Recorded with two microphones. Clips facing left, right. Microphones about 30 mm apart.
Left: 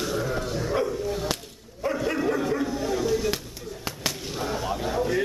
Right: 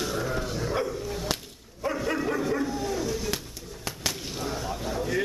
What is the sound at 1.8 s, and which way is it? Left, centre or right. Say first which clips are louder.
Dog: left 2 dB; centre.